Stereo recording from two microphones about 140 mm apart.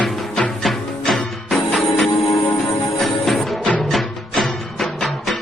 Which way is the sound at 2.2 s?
20° left (ahead or behind).